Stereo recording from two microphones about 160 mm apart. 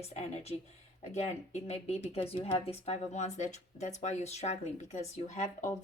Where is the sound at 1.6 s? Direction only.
40° left (ahead or behind).